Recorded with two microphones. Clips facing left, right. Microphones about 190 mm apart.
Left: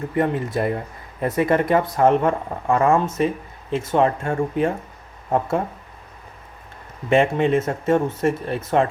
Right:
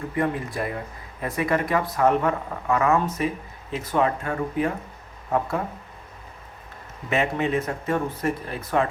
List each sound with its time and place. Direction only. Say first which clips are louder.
0.2 s speech: left 5 dB; 25° left (ahead or behind)
7.1 s speech: left 6 dB; 25° left (ahead or behind)